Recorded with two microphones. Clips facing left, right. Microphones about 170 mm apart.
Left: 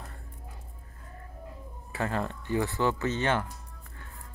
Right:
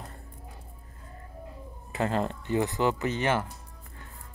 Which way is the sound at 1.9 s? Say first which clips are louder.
Right 3 dB; 20° right (ahead or behind).